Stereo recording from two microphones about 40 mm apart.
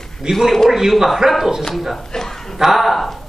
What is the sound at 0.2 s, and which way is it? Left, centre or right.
Speech, centre.